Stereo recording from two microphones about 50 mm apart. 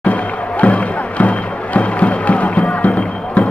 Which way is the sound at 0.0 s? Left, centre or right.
Left.